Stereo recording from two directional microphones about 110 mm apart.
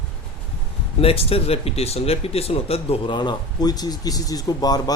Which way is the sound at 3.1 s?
45° left (ahead or behind).